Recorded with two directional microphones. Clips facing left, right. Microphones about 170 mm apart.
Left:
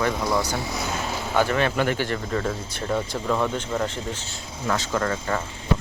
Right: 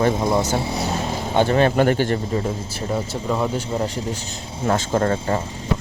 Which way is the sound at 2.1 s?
20° right (ahead or behind).